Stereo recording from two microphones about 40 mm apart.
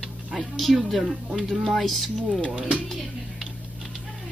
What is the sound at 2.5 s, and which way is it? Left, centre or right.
Speech, right.